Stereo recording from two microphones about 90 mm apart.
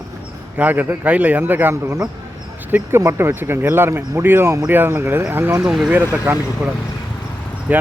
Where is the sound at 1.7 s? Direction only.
35° right (ahead or behind).